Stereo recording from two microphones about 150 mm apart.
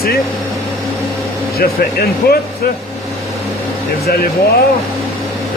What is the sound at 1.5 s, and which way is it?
Speech, 90° left.